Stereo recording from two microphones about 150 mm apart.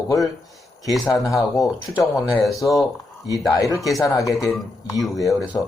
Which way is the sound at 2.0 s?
Centre (ahead or behind).